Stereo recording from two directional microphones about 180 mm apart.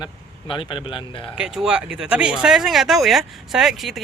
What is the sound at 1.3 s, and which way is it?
Speech, 5° right (ahead or behind).